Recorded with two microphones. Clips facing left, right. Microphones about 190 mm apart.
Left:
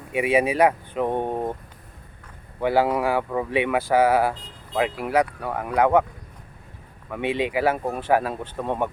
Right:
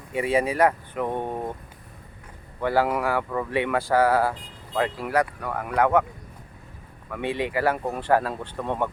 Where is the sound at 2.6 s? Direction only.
15° left (ahead or behind).